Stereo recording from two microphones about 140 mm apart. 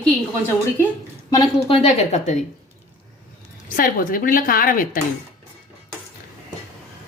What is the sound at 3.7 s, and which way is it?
A woman's voice, 90° left.